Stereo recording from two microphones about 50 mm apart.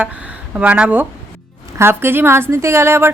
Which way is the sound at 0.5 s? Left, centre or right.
Right.